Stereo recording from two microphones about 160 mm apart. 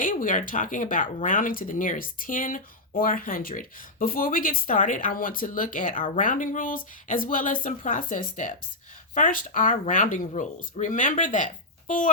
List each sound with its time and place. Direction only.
0.0 s speech: 55° left (ahead or behind)